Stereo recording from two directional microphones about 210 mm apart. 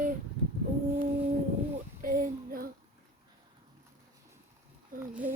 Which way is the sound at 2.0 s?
40° right (ahead or behind).